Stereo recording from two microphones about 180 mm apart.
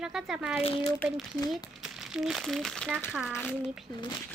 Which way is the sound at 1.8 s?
Centre (ahead or behind).